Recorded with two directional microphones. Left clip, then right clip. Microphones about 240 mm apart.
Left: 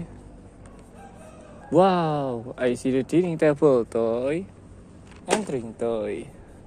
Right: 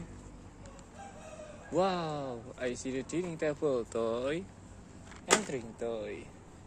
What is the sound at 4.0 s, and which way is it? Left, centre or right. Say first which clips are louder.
Speech: left 9 dB; centre.